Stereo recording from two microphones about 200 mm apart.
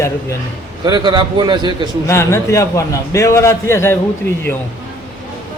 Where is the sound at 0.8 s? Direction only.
20° right (ahead or behind).